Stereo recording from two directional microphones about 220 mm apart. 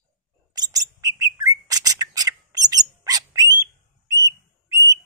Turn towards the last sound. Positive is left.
turn(degrees=-15)  # may be behind; listen again after turning